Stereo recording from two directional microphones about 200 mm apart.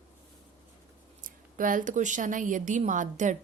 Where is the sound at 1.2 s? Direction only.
40° right (ahead or behind).